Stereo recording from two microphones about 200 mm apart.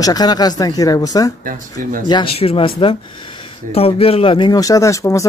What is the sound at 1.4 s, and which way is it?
Speech, 40° right (ahead or behind).